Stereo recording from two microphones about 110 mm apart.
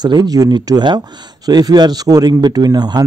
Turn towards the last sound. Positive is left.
turn(degrees=-40)  # may be behind; listen again after turning